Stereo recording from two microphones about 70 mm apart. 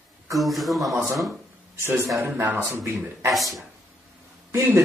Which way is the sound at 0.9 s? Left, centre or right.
Right.